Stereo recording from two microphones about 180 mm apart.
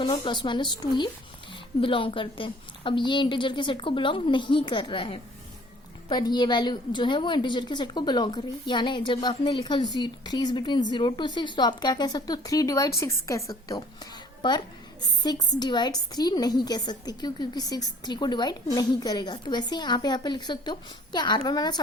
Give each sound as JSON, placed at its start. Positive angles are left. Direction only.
{"t": 0.0, "sound": "a woman's voice", "side_deg": 25}